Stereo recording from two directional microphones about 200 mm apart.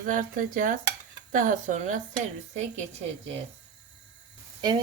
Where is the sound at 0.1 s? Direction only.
40° right (ahead or behind).